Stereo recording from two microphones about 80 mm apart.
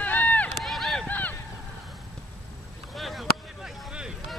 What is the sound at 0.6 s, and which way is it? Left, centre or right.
Run, centre.